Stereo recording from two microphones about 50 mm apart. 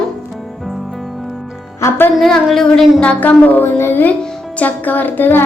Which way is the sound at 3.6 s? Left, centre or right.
Left.